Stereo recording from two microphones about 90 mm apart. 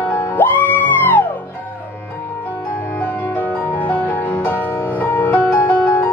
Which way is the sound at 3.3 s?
20° left (ahead or behind).